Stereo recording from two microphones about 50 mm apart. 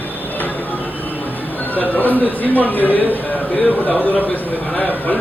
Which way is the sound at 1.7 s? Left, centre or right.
Left.